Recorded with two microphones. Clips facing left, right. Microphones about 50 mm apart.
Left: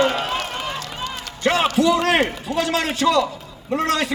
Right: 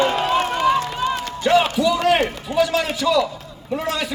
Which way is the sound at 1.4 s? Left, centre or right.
Left.